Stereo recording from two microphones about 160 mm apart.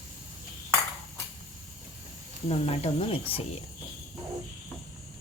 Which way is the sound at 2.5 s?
40° left (ahead or behind).